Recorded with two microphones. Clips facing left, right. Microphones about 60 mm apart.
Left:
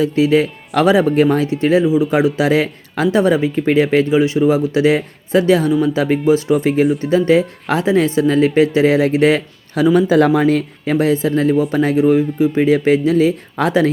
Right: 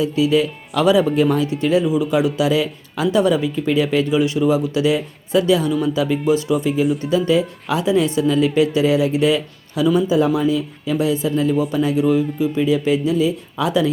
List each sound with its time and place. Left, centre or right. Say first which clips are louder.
0.0 s speech: left 3 dB; left
0.7 s speech: left 3 dB; left
1.1 s speech: left 3 dB; left
6.5 s speech: left 4 dB; left
10.1 s speech: left 4 dB; left
10.9 s speech: left 4 dB; left